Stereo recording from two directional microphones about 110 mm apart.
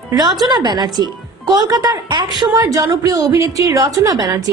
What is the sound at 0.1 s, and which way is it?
A woman's voice, 35° right (ahead or behind).